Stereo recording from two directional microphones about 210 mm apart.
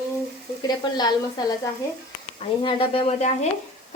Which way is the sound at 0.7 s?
20° left (ahead or behind).